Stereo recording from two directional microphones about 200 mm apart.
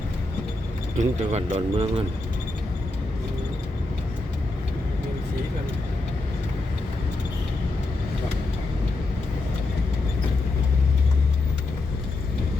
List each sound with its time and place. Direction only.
0.9 s speech: 35° right (ahead or behind)